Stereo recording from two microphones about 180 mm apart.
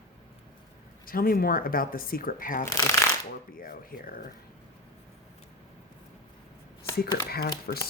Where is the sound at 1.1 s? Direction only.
55° left (ahead or behind).